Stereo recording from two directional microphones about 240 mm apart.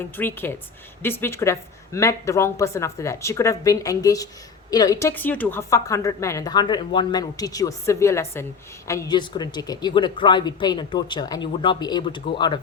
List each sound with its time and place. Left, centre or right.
0.0 s a woman's voice: centre